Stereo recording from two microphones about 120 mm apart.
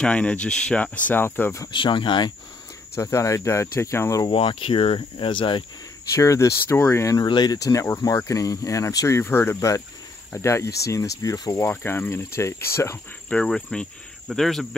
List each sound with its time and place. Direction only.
0.0 s speech: 10° left (ahead or behind)
1.7 s speech: 40° left (ahead or behind)
3.0 s speech: 25° left (ahead or behind)
4.3 s speech: 45° left (ahead or behind)
6.1 s speech: 25° left (ahead or behind)
7.2 s speech: 35° left (ahead or behind)
11.6 s speech: 20° left (ahead or behind)
13.3 s speech: 10° left (ahead or behind)